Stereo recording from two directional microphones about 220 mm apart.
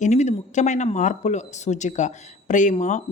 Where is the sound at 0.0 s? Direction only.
30° left (ahead or behind).